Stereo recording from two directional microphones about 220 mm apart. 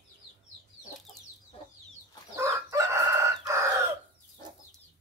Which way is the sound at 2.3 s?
15° right (ahead or behind).